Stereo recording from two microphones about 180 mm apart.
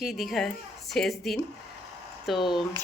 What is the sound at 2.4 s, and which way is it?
Speech, 25° left (ahead or behind).